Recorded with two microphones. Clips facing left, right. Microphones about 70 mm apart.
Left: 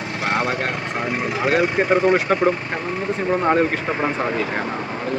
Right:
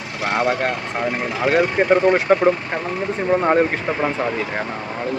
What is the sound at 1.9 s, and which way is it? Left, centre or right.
Speech, centre.